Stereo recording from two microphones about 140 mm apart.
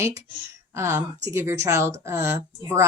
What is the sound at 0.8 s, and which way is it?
A woman's voice, 20° right (ahead or behind).